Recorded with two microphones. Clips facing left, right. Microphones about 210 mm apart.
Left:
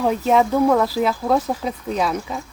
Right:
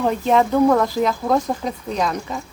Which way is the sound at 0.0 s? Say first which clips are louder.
Even; 5° left (ahead or behind).